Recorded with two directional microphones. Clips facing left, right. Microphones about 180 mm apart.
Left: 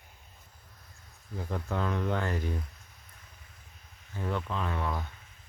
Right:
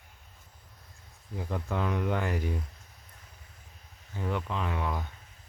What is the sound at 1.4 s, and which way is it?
Speech, 15° right (ahead or behind).